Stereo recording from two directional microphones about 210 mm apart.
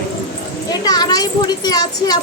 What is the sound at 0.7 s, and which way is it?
Speech, 20° left (ahead or behind).